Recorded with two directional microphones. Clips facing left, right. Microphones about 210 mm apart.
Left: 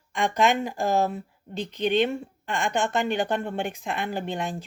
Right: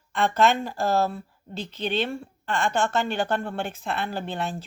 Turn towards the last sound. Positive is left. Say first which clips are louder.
# left 1 dB
turn(degrees=15)  # may be behind; listen again after turning